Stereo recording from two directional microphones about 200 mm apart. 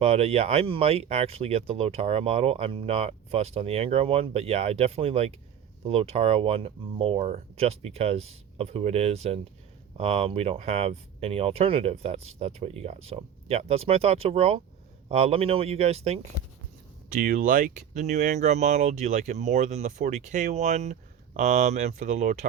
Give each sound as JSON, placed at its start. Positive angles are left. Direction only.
{"t": 0.0, "sound": "speech", "side_deg": -30}
{"t": 17.1, "sound": "speech", "side_deg": -45}